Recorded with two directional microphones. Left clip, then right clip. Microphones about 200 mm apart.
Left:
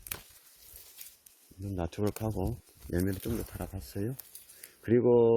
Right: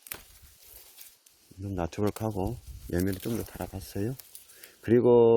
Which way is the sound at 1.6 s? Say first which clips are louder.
Right 3 dB; 15° right (ahead or behind).